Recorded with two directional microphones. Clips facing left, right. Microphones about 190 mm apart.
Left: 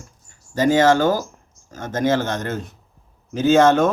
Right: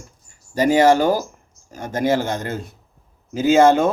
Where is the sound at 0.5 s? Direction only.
10° right (ahead or behind).